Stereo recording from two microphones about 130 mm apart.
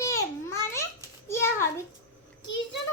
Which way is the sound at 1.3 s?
20° left (ahead or behind).